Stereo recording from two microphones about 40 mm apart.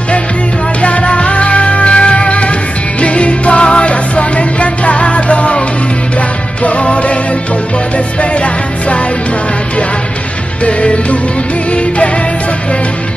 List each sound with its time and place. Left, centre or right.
0.8 s music: left
6.6 s music: left
8.2 s music: left
10.6 s music: left